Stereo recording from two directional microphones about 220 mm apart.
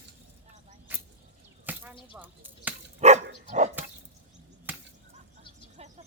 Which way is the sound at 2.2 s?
5° right (ahead or behind).